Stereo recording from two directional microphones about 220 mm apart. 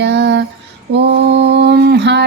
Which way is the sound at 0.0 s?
50° right (ahead or behind).